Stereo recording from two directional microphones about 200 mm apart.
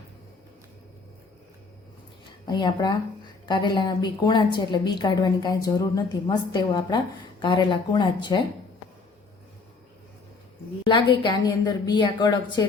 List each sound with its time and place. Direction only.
2.5 s a woman's voice: 20° left (ahead or behind)
10.8 s a woman's voice: 25° left (ahead or behind)